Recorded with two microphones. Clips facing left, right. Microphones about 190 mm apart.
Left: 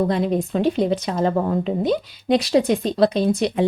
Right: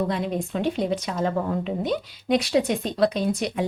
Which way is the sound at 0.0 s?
35° left (ahead or behind).